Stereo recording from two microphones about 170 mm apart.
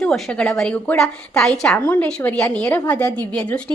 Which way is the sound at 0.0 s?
5° left (ahead or behind).